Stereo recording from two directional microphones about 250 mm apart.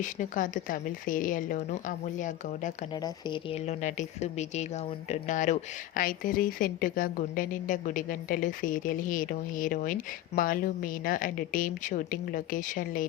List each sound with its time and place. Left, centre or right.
0.0 s a woman's voice: left
2.9 s a woman's voice: centre; by 13.1 s left